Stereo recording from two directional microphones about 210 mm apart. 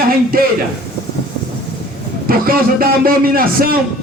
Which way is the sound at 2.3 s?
45° right (ahead or behind).